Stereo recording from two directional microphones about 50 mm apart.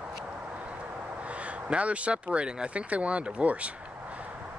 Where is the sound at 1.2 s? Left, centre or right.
Right.